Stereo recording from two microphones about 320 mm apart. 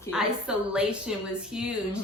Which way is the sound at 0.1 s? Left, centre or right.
Centre.